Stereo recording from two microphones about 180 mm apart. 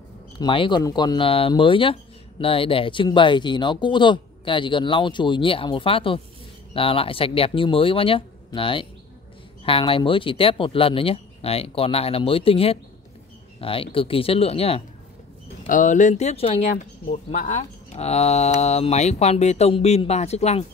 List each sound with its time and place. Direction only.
0.4 s speech: 25° left (ahead or behind)
15.6 s speech: 45° left (ahead or behind)